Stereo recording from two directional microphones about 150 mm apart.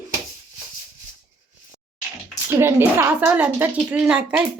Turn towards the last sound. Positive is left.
turn(degrees=-10)  # may be behind; listen again after turning